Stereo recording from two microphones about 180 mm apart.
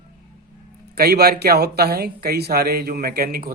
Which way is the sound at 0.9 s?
60° right (ahead or behind).